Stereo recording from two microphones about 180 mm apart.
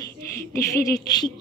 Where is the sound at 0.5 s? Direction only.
15° left (ahead or behind).